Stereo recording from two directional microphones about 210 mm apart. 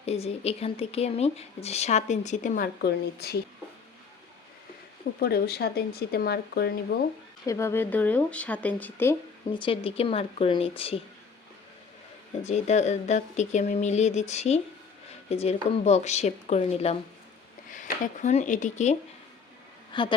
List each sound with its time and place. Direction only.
0.0 s speech: 30° left (ahead or behind); by 3.3 s 50° left (ahead or behind)
5.2 s speech: 50° left (ahead or behind)
7.4 s speech: 15° left (ahead or behind)
9.5 s speech: 25° left (ahead or behind)
12.4 s speech: 30° left (ahead or behind)
19.9 s a woman's voice: 20° left (ahead or behind)